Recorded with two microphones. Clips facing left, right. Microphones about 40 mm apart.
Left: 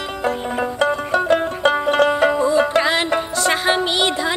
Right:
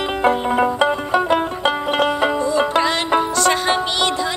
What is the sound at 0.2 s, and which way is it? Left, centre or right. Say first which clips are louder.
Music: right 5 dB; right.